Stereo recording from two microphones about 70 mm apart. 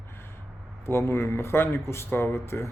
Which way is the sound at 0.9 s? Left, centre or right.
Left.